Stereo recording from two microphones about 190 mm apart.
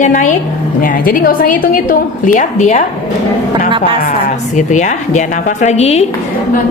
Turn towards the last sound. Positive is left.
turn(degrees=35)  # may be behind; listen again after turning